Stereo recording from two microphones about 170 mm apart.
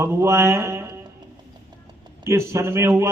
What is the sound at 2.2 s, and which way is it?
Speech, 15° right (ahead or behind).